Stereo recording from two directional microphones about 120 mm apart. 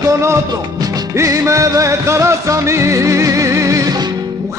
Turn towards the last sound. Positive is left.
turn(degrees=-30)  # may be behind; listen again after turning